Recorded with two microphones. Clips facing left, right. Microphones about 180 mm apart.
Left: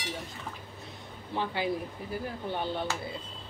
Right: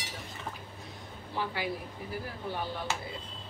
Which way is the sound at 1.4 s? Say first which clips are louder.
Left 3 dB; 25° left (ahead or behind).